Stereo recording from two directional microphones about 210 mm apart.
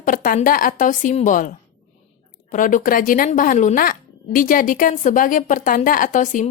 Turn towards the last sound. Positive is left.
turn(degrees=35)  # may be behind; listen again after turning